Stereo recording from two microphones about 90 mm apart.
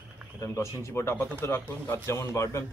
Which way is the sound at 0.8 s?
30° left (ahead or behind).